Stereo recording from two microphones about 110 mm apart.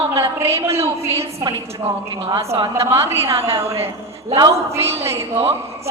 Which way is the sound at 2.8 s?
25° right (ahead or behind).